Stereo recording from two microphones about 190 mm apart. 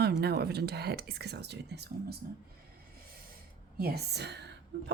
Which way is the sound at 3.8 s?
55° right (ahead or behind).